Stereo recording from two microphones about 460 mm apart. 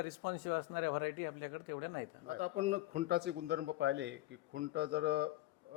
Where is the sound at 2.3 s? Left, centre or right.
Centre.